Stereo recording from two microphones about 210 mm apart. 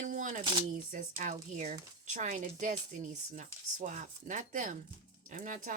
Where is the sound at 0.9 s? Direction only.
40° right (ahead or behind).